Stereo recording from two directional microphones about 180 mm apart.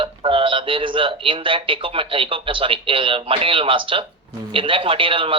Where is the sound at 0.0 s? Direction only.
30° right (ahead or behind).